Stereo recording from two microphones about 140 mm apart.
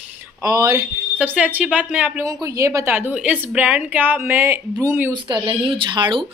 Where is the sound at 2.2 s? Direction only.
25° right (ahead or behind).